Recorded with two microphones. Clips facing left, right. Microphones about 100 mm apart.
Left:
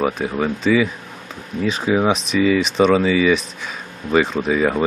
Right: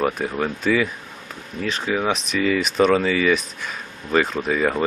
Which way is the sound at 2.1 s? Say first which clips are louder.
Left 4 dB; 5° left (ahead or behind).